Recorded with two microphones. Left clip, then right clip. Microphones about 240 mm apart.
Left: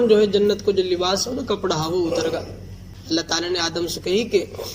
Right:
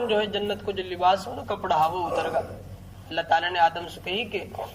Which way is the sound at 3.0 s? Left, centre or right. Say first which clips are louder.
Left 1 dB; left.